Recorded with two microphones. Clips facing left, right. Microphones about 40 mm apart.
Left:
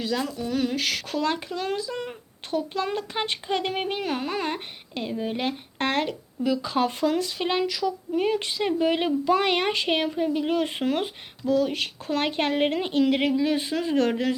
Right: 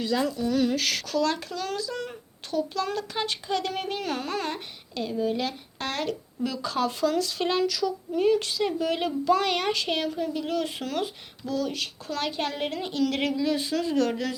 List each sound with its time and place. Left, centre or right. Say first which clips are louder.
0.1 s speech: right 3 dB; centre
0.3 s speech: right 2 dB; centre
1.0 s speech: even; left
6.1 s speech: left 4 dB; centre
6.7 s speech: right 1 dB; left
13.1 s speech: left 5 dB; centre
13.4 s speech: left 1 dB; left